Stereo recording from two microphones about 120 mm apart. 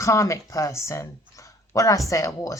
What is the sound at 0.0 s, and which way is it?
A woman's voice, 25° left (ahead or behind).